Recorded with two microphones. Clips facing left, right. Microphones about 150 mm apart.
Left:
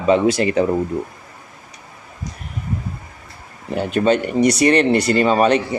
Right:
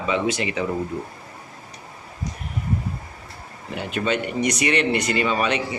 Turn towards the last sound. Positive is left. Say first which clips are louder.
# left 7 dB
turn(degrees=40)  # may be behind; listen again after turning